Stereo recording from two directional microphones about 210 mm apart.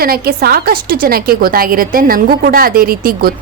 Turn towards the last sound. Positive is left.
turn(degrees=-45)  # may be behind; listen again after turning